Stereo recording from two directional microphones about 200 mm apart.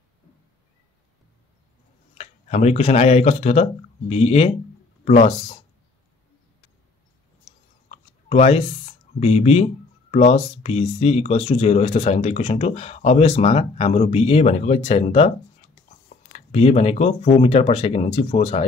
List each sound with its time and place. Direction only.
2.1 s speech: 35° left (ahead or behind)
7.9 s chewing: 30° left (ahead or behind)
9.2 s speech: 30° left (ahead or behind)
16.3 s speech: 30° left (ahead or behind)